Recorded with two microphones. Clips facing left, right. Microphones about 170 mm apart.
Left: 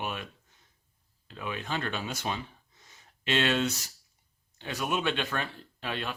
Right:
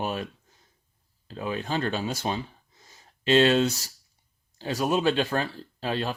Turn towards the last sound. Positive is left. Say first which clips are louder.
# right 6 dB
turn(degrees=-35)  # may be behind; listen again after turning